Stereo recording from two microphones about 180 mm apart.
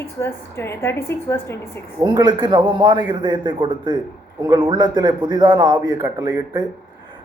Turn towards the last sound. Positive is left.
turn(degrees=-20)  # may be behind; listen again after turning